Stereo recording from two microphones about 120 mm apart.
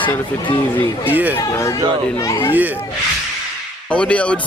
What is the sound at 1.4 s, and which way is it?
Speech, 25° left (ahead or behind).